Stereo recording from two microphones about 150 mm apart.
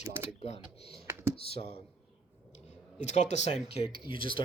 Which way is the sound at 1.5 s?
90° right.